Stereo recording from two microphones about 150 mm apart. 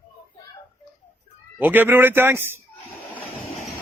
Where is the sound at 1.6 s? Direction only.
10° right (ahead or behind).